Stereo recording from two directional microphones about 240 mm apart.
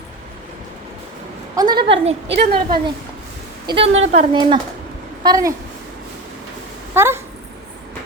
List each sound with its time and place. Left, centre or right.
1.5 s a woman's voice: centre
2.4 s a woman's voice: right
3.7 s a woman's voice: right
6.9 s a woman's voice: centre